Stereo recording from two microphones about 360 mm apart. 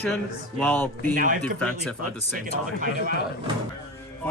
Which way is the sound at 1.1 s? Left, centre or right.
Right.